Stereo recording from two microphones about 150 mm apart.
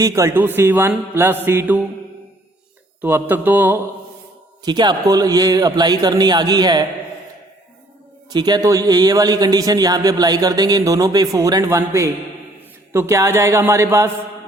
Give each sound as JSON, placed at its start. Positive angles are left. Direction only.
{"t": 0.0, "sound": "a man's voice", "side_deg": -20}
{"t": 3.0, "sound": "a man's voice", "side_deg": -15}
{"t": 4.6, "sound": "a man's voice", "side_deg": -30}
{"t": 8.3, "sound": "a man's voice", "side_deg": -30}